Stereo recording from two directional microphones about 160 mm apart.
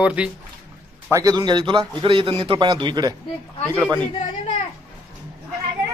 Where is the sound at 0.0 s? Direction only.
5° right (ahead or behind).